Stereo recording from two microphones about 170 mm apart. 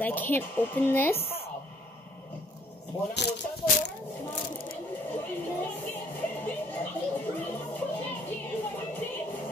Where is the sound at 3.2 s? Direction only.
80° left.